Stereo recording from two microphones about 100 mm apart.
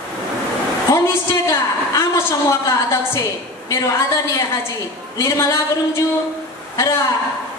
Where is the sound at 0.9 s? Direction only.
30° left (ahead or behind).